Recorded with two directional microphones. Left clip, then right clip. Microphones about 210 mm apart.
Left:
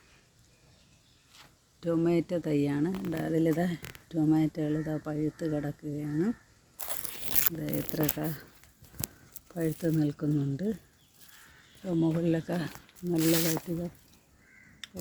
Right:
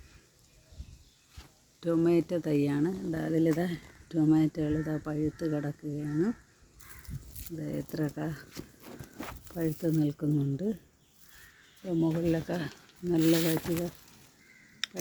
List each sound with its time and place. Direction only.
1.8 s speech: centre (ahead or behind)
7.6 s speech: 10° left (ahead or behind)
9.6 s speech: 5° left (ahead or behind)
11.9 s speech: 10° left (ahead or behind)
13.1 s speech: 35° left (ahead or behind)